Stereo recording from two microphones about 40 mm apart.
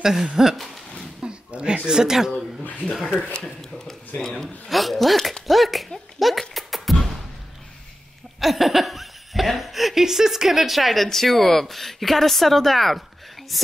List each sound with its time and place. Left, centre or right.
0.0 s a sound: centre
1.2 s speech: right
2.9 s a child's voice: centre
6.5 s beatboxing: centre
8.4 s speech: centre